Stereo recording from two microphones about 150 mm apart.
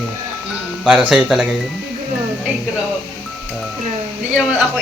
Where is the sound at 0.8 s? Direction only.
10° right (ahead or behind).